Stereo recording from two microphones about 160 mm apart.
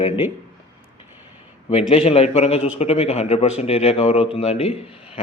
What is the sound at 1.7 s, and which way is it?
Speech, 40° left (ahead or behind).